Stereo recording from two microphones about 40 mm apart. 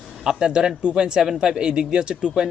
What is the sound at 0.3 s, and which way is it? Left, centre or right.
Speech, centre.